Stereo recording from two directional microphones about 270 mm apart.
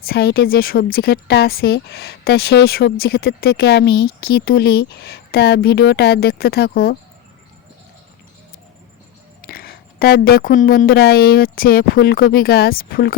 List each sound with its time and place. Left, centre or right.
0.0 s speech: left
9.5 s speech: left